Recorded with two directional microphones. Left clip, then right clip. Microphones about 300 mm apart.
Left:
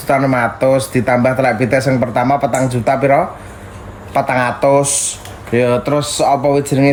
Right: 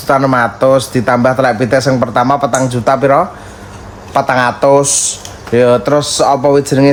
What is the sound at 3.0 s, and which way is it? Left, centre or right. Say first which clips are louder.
Speech: right 3 dB; centre.